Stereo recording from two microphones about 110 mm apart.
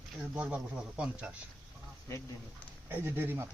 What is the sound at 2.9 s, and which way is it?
Speech, 20° right (ahead or behind).